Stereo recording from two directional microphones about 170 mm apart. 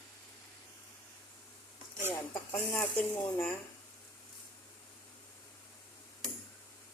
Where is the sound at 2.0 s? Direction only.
10° left (ahead or behind).